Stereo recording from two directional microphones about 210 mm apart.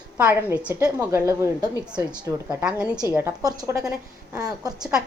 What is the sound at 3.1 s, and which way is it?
A woman's voice, 15° right (ahead or behind).